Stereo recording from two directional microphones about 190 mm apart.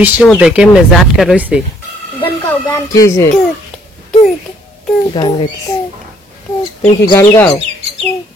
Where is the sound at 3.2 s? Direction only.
5° left (ahead or behind).